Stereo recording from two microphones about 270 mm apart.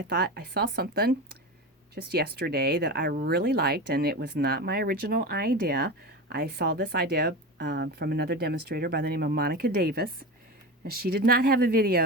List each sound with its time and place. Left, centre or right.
0.1 s speech: right